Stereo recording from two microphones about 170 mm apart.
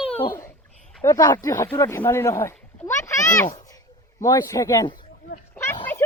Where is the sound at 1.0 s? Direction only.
20° left (ahead or behind).